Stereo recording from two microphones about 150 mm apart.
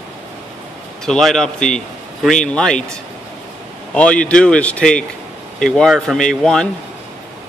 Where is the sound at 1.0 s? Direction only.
5° left (ahead or behind).